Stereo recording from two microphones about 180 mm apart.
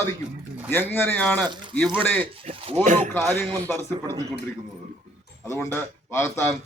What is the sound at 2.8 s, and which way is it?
Speech, 45° right (ahead or behind).